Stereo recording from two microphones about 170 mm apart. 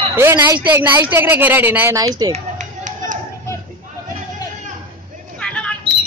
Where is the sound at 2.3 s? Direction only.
45° right (ahead or behind).